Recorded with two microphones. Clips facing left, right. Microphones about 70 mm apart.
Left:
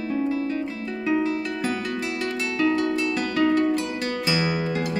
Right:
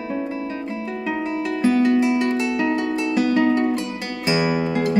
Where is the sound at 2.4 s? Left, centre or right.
Centre.